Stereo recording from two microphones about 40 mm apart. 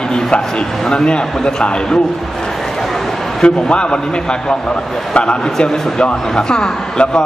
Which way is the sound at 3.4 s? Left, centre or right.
Left.